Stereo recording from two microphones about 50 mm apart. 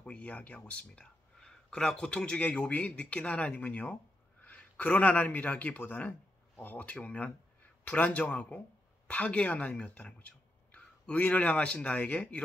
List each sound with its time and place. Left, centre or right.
0.0 s a man's voice: left